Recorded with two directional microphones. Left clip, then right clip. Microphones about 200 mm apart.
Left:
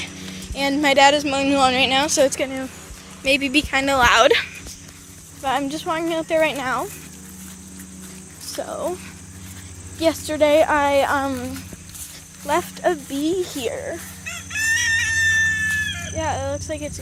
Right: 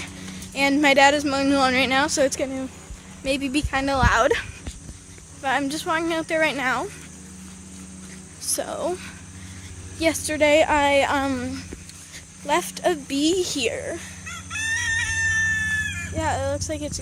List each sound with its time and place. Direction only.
0.5 s a woman's voice: 20° right (ahead or behind)
8.5 s speech: 30° right (ahead or behind)
10.0 s speech: 15° right (ahead or behind)
11.1 s a woman's voice: 30° right (ahead or behind)
12.5 s a woman's voice: 15° right (ahead or behind); by 14.0 s 30° right (ahead or behind)
14.3 s chicken: 15° right (ahead or behind); by 16.1 s 35° right (ahead or behind)
16.1 s a woman's voice: 25° right (ahead or behind)